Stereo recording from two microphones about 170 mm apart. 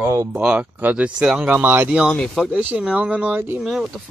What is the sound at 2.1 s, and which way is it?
Speech, 5° left (ahead or behind).